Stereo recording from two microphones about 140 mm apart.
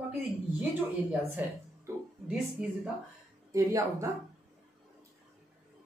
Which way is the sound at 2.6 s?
5° right (ahead or behind).